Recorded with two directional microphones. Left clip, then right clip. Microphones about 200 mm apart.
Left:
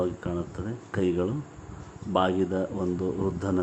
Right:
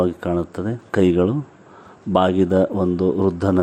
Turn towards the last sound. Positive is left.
turn(degrees=-35)  # may be behind; listen again after turning